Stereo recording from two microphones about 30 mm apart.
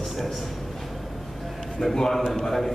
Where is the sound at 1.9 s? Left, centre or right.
Centre.